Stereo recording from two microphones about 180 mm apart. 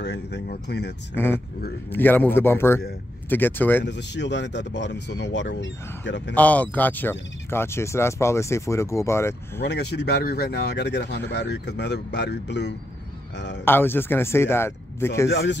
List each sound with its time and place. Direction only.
0.0 s speech: 70° left (ahead or behind)
1.1 s speech: 10° left (ahead or behind)
3.8 s speech: 75° left (ahead or behind)
6.3 s speech: 10° left (ahead or behind)
9.6 s speech: 65° left (ahead or behind)
13.7 s speech: 10° left (ahead or behind)
15.2 s speech: 75° left (ahead or behind)